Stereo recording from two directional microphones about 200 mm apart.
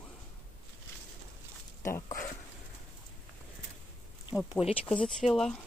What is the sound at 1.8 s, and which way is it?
Speech, 15° left (ahead or behind).